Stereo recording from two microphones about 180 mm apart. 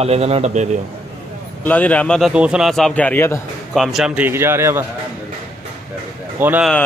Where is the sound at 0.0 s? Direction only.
35° right (ahead or behind).